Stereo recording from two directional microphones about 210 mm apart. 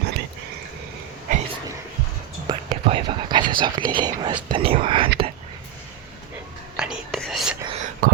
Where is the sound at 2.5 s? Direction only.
25° right (ahead or behind).